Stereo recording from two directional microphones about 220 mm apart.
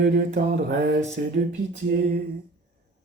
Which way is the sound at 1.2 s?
45° right (ahead or behind).